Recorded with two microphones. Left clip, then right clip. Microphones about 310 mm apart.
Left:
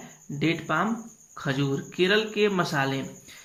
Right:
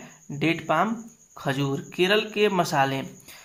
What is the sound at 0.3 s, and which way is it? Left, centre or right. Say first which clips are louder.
Speech: right 3 dB; right.